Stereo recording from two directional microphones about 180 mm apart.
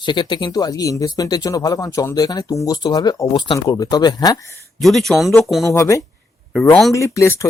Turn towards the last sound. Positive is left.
turn(degrees=15)  # may be behind; listen again after turning